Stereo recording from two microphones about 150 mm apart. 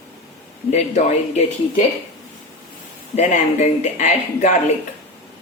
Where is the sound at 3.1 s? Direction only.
50° left (ahead or behind).